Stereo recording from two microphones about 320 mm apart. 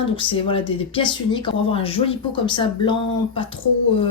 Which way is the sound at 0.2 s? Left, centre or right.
Centre.